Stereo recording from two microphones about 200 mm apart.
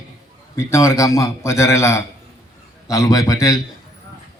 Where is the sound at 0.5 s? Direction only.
15° left (ahead or behind).